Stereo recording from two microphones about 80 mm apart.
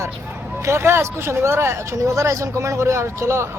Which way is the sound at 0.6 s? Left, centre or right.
Right.